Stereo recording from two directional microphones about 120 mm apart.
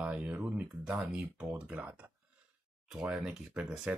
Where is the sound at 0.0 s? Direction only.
10° right (ahead or behind).